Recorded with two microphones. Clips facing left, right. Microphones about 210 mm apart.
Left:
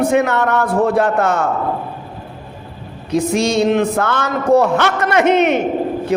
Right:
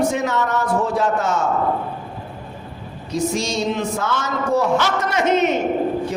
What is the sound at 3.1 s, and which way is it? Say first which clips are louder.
Speech: left 6 dB; 60° left (ahead or behind).